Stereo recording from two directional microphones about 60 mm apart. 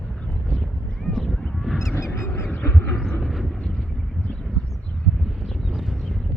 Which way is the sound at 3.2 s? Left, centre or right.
Centre.